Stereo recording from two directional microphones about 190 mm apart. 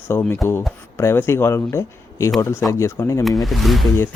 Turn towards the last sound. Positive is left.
turn(degrees=0)  # may be behind; listen again after turning